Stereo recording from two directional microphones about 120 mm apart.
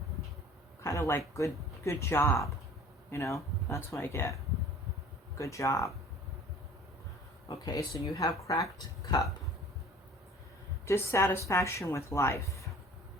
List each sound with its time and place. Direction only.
0.8 s a sound: 25° left (ahead or behind)
1.8 s speech: 25° left (ahead or behind)
5.4 s speech: 25° left (ahead or behind)
7.4 s speech: 30° left (ahead or behind)
10.8 s speech: 20° left (ahead or behind)